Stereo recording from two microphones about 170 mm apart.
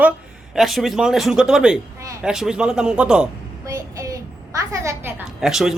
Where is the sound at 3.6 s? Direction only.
20° right (ahead or behind).